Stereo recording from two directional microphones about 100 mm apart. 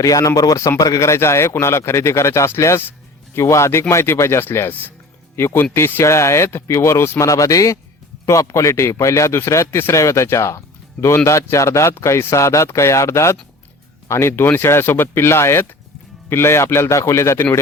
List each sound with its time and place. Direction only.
0.0 s a man's voice: 35° left (ahead or behind)